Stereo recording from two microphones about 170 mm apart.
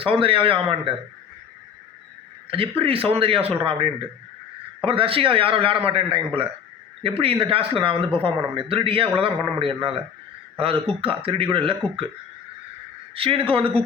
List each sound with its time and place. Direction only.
0.0 s a man's voice: 30° right (ahead or behind)
2.5 s a man's voice: 35° right (ahead or behind)
13.1 s a man's voice: 35° right (ahead or behind)